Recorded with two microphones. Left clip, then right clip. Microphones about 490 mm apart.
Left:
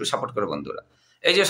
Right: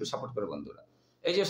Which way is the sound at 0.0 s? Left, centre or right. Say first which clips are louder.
Left 9 dB; right.